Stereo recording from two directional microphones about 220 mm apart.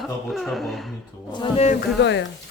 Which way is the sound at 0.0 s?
Centre (ahead or behind).